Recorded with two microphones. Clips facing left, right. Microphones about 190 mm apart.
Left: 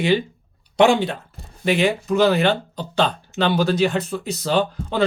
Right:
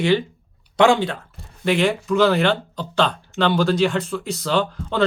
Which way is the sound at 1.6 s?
15° left (ahead or behind).